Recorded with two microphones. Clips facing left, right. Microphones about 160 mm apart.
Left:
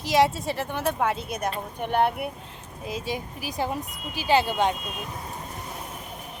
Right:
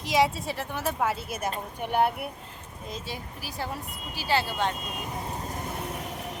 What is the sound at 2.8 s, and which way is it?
Speech, 10° left (ahead or behind).